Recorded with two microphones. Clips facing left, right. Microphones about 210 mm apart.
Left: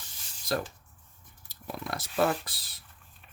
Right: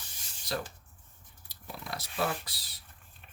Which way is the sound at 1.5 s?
50° left (ahead or behind).